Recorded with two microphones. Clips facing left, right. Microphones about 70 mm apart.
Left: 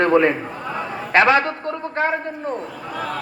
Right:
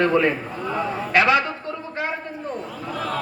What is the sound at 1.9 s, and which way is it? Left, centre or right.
Speech, left.